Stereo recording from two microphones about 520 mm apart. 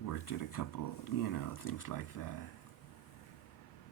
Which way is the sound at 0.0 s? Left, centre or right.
Left.